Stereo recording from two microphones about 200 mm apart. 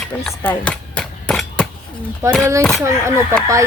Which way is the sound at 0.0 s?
5° left (ahead or behind).